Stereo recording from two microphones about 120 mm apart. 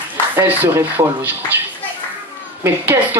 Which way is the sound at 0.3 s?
15° right (ahead or behind).